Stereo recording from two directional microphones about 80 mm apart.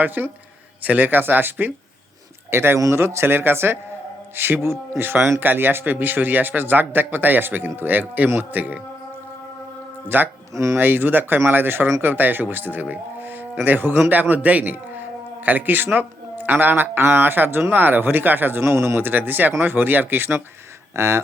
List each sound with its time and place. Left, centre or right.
0.0 s speech: right
10.1 s speech: right
10.5 s speech: right
10.8 s speech: right